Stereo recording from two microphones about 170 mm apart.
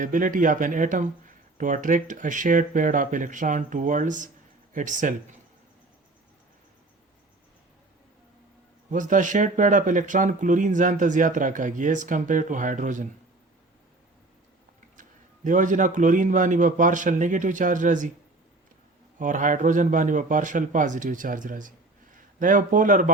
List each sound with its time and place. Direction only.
0.0 s speech: 50° right (ahead or behind)
8.9 s speech: 50° right (ahead or behind)
15.4 s speech: 50° right (ahead or behind)
19.2 s speech: 50° right (ahead or behind)